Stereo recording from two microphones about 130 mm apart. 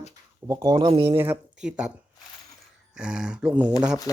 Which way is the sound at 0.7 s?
35° right (ahead or behind).